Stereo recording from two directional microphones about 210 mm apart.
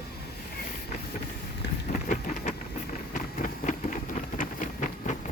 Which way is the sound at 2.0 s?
35° left (ahead or behind).